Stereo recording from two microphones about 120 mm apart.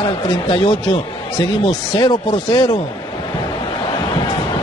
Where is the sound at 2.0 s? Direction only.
35° left (ahead or behind).